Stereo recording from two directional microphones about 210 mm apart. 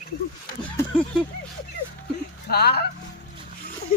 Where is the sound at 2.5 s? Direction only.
50° left (ahead or behind).